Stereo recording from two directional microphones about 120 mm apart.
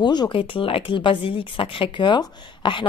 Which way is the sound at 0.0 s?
40° left (ahead or behind).